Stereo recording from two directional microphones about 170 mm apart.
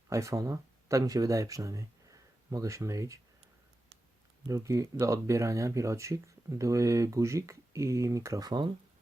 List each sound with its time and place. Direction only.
0.1 s speech: 20° right (ahead or behind)
4.4 s speech: 20° right (ahead or behind)